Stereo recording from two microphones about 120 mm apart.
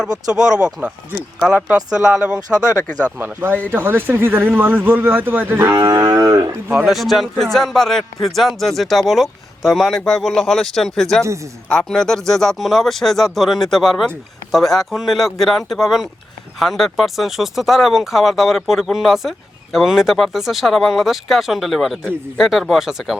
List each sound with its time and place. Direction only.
0.3 s a man's voice: 5° right (ahead or behind)
3.2 s speech: 15° right (ahead or behind)
5.7 s cattle: 30° right (ahead or behind)
6.7 s a man's voice: 5° right (ahead or behind)